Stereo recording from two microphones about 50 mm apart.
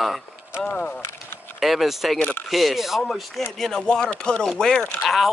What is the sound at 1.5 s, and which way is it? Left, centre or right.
Speech, centre.